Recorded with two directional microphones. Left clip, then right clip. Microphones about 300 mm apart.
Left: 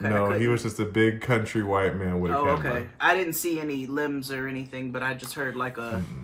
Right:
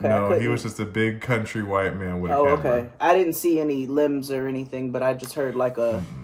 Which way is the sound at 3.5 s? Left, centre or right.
Left.